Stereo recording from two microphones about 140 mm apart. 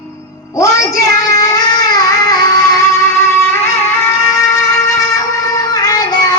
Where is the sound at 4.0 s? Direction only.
20° left (ahead or behind).